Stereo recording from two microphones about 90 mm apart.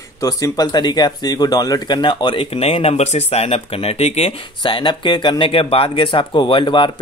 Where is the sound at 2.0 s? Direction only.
60° left (ahead or behind).